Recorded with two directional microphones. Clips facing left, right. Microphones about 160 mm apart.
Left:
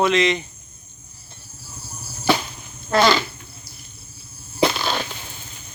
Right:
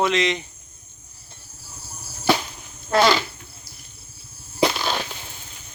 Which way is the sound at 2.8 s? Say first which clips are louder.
Left 1 dB; 10° right (ahead or behind).